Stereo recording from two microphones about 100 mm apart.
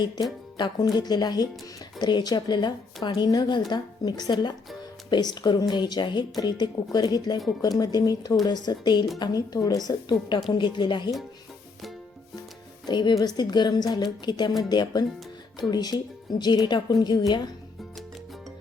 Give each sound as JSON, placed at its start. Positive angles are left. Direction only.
{"t": 0.0, "sound": "a woman's voice", "side_deg": 45}
{"t": 12.8, "sound": "speech", "side_deg": 50}